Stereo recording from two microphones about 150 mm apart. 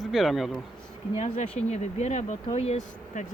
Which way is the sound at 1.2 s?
50° left (ahead or behind).